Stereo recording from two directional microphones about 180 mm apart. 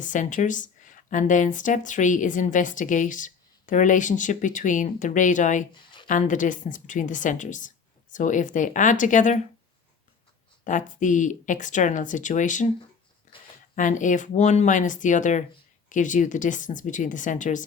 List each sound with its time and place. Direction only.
0.0 s speech: 45° left (ahead or behind)
5.7 s a sound: 25° left (ahead or behind)
6.1 s speech: 45° left (ahead or behind)
10.6 s speech: 45° left (ahead or behind)
13.7 s speech: 45° left (ahead or behind)